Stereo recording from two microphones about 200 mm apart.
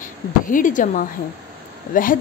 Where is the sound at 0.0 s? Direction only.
40° left (ahead or behind).